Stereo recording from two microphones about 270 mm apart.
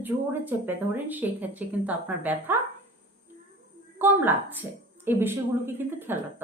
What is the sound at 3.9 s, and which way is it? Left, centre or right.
A woman's voice, centre.